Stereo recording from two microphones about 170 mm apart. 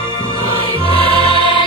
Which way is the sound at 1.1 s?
30° left (ahead or behind).